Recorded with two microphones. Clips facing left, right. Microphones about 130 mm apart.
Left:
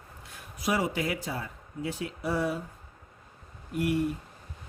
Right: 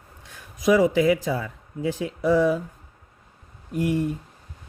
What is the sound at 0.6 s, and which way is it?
Speech, 90° right.